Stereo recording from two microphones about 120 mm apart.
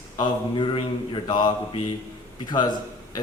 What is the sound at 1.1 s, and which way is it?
A man's voice, 40° left (ahead or behind).